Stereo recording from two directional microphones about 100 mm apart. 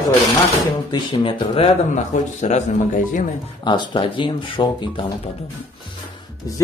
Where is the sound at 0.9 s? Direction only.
55° left (ahead or behind).